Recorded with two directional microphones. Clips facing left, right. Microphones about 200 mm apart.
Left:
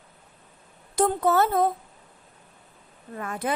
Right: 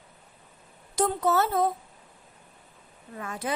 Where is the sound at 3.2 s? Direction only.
55° left (ahead or behind).